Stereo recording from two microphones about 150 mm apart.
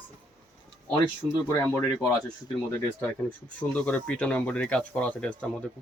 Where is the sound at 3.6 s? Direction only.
10° left (ahead or behind).